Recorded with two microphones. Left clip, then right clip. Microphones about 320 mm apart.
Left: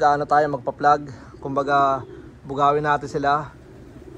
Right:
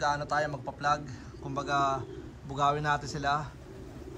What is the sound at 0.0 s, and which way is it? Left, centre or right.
A man's voice, centre.